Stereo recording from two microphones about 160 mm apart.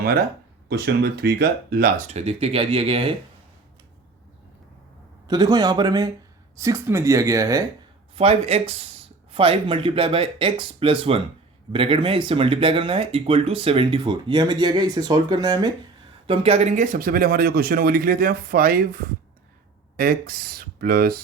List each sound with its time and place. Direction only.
0.7 s speech: 90° right; by 1.9 s 70° right (ahead or behind)
2.0 s speech: 40° right (ahead or behind)
5.3 s speech: 25° right (ahead or behind)
8.1 s speech: 40° right (ahead or behind)
16.2 s speech: 35° right (ahead or behind); by 21.2 s 70° right (ahead or behind)